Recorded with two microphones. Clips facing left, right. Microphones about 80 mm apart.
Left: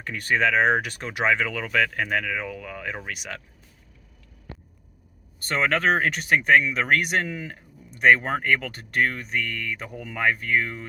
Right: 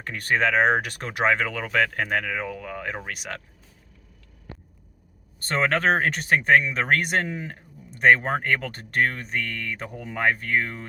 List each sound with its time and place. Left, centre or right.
0.0 s speech: right
5.4 s speech: right